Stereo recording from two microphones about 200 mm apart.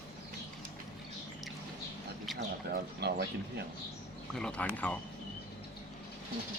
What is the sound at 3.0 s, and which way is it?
Speech, 55° right (ahead or behind).